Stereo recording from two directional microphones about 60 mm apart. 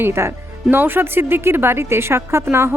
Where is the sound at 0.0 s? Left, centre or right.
Right.